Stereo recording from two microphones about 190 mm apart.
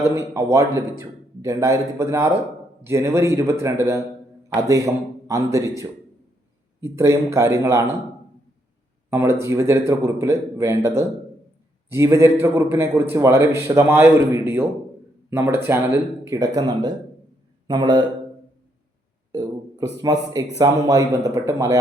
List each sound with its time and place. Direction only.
0.0 s a man's voice: 15° right (ahead or behind)
9.0 s a man's voice: 15° right (ahead or behind)
20.0 s a man's voice: 20° right (ahead or behind)